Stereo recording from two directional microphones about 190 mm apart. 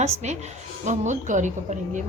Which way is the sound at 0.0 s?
35° right (ahead or behind).